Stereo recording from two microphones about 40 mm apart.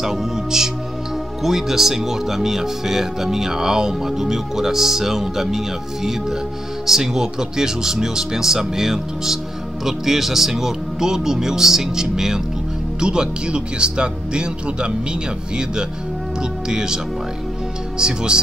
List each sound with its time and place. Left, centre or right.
0.0 s speech: centre
6.9 s speech: centre